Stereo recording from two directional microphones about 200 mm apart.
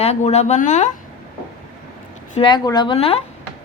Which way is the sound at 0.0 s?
30° left (ahead or behind).